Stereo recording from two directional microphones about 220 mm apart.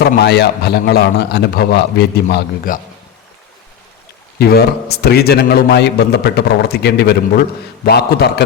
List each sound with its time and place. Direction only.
0.0 s a man's voice: 45° left (ahead or behind)
4.4 s a man's voice: 45° left (ahead or behind)